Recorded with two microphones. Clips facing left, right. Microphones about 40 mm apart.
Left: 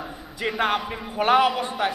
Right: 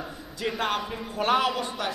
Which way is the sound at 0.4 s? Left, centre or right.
Centre.